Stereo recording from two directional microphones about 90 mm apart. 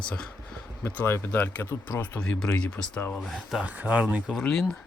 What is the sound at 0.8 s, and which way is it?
Speech, 30° left (ahead or behind).